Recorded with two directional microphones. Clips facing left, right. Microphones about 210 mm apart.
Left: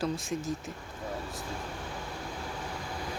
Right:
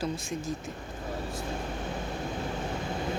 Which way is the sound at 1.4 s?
20° right (ahead or behind).